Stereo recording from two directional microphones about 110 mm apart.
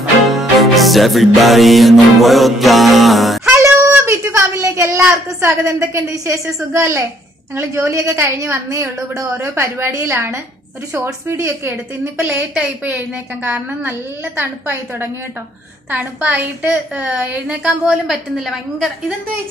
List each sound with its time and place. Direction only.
0.3 s music: centre (ahead or behind)
3.4 s a sound: 25° right (ahead or behind)
5.1 s a woman's voice: 25° right (ahead or behind)
12.5 s a woman's voice: 15° right (ahead or behind)